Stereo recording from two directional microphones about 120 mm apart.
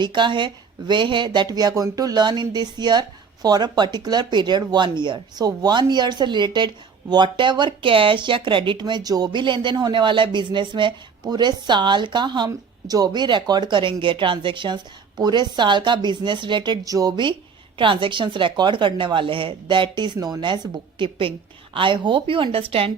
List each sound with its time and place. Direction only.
0.0 s speech: 40° right (ahead or behind)